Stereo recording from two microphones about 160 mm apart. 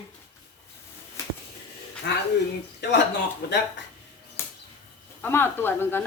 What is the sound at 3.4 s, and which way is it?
Speech, 80° left.